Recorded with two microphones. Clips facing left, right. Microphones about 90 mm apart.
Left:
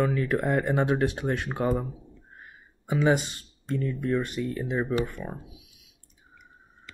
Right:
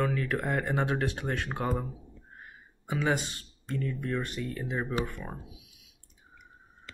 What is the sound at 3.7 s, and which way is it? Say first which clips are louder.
Speech: left 5 dB; centre (ahead or behind).